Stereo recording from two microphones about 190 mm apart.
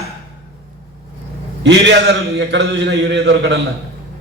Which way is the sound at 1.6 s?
70° right (ahead or behind).